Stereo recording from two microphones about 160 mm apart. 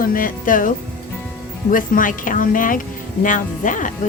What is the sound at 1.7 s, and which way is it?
Speech, 55° left (ahead or behind).